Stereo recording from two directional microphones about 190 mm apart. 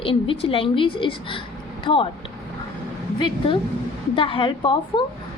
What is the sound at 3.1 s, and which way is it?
A woman's voice, 25° left (ahead or behind).